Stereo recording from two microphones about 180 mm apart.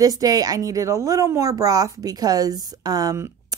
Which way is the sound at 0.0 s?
20° right (ahead or behind).